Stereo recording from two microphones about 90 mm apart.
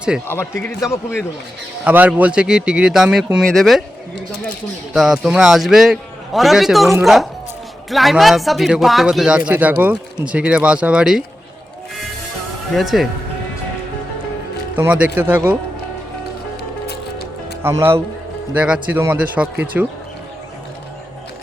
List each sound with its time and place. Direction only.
0.3 s a man's voice: 25° left (ahead or behind)
1.8 s a man's voice: 15° right (ahead or behind); by 3.8 s centre (ahead or behind)
4.9 s a man's voice: 5° right (ahead or behind)
12.7 s a man's voice: centre (ahead or behind)
14.8 s speech: 15° right (ahead or behind)
17.6 s speech: 25° right (ahead or behind)
18.5 s speech: 15° right (ahead or behind)